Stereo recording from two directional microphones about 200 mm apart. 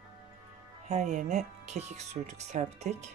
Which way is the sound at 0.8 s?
35° right (ahead or behind).